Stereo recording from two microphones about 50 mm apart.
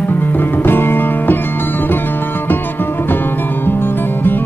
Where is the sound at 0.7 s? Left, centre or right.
Left.